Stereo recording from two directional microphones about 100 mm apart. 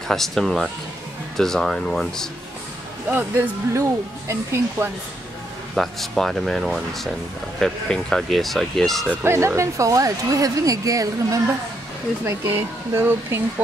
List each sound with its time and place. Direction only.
0.1 s speech: 5° left (ahead or behind)
3.1 s speech: 25° right (ahead or behind)
5.8 s speech: 5° left (ahead or behind)
9.2 s speech: 25° right (ahead or behind)